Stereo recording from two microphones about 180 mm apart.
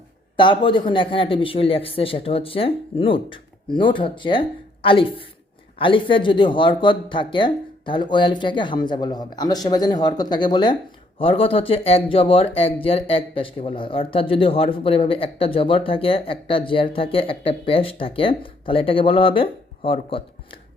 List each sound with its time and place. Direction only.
0.3 s speech: 25° left (ahead or behind)